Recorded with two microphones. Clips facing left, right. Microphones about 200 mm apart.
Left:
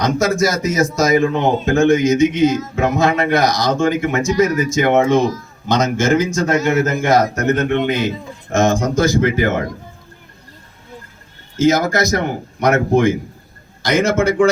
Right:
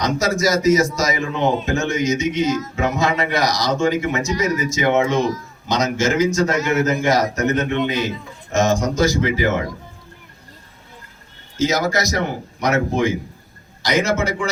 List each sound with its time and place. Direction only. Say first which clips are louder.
0.0 s a man's voice: left 3 dB; 55° left (ahead or behind)
11.5 s a man's voice: left 5 dB; 50° left (ahead or behind)